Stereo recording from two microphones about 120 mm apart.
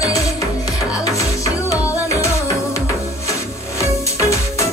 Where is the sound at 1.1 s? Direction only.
25° left (ahead or behind).